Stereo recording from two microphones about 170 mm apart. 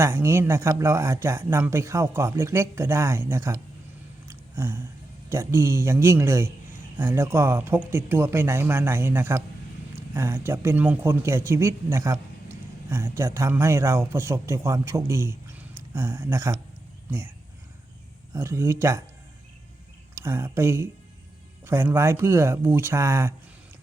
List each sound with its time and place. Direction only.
0.0 s speech: 15° right (ahead or behind)
4.3 s a sound: 15° right (ahead or behind)
5.3 s speech: 15° right (ahead or behind)
18.3 s speech: 15° right (ahead or behind)
20.1 s speech: 15° right (ahead or behind)